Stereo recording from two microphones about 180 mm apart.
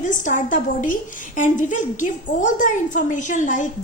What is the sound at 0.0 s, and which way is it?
A woman's voice, 45° left (ahead or behind).